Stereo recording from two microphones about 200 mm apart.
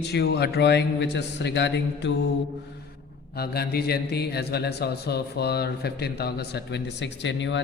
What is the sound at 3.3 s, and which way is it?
Speech, 50° left (ahead or behind).